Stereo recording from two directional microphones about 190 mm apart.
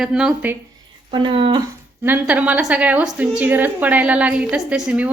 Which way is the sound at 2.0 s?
10° right (ahead or behind).